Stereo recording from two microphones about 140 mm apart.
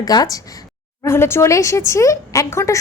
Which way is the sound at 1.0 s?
15° left (ahead or behind).